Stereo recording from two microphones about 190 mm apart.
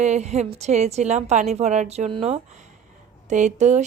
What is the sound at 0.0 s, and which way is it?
Speech, 35° right (ahead or behind).